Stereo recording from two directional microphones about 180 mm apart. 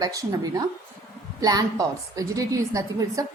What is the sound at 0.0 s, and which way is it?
A woman's voice, 20° right (ahead or behind).